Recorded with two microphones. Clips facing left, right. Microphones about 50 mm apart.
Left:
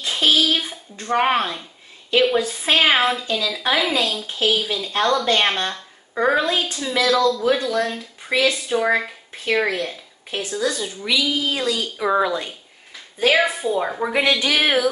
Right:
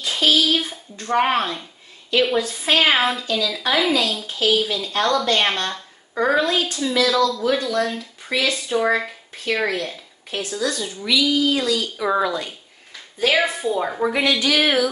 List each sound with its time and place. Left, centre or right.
0.0 s a sound: left
1.0 s speech: centre
2.8 s a woman's voice: centre
4.3 s speech: centre
6.9 s speech: centre
7.7 s speech: centre
11.1 s speech: left
13.3 s a woman's voice: centre